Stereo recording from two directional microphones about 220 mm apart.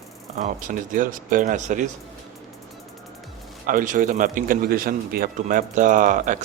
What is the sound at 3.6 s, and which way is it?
A man's voice, 35° right (ahead or behind).